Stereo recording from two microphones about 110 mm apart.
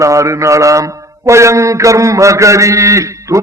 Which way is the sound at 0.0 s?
30° right (ahead or behind).